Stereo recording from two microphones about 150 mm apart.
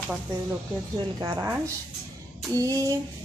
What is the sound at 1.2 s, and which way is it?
Speech, 25° right (ahead or behind).